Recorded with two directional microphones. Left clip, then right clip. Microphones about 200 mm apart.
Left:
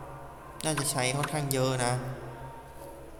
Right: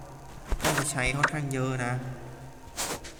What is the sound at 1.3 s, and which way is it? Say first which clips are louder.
Speech: left 2 dB; 85° left.